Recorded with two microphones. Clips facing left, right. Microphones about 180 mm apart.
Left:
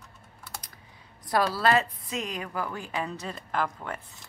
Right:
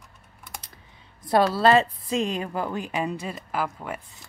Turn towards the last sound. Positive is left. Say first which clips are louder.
# right 1 dB
turn(degrees=-10)  # may be behind; listen again after turning